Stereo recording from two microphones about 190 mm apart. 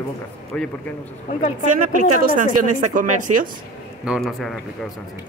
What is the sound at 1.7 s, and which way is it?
A woman's voice, 45° right (ahead or behind).